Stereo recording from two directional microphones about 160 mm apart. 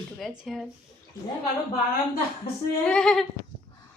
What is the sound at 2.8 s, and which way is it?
Speech, 5° left (ahead or behind).